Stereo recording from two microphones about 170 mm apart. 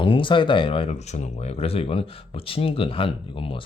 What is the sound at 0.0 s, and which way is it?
Speech, 30° left (ahead or behind).